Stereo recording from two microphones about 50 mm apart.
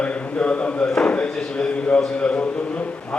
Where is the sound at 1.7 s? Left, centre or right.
Left.